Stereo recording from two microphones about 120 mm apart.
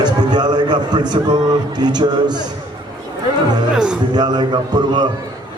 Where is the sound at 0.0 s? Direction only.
35° right (ahead or behind).